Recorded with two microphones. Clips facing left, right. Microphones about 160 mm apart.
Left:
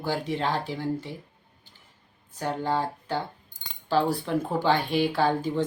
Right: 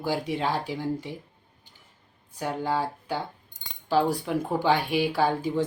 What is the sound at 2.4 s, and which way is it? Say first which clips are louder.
Speech: even; 10° right (ahead or behind).